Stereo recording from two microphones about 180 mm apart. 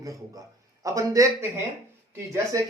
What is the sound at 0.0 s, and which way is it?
A man's voice, 20° right (ahead or behind).